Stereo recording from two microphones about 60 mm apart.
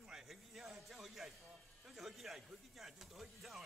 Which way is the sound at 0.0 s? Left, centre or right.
Centre.